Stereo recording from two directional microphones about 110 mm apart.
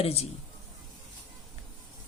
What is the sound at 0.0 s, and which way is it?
Speech, 70° left (ahead or behind).